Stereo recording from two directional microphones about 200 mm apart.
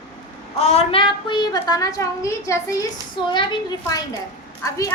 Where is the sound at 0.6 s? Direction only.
30° left (ahead or behind).